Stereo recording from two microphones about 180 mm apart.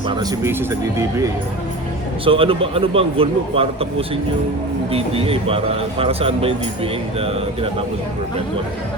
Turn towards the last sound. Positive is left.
turn(degrees=-30)  # may be behind; listen again after turning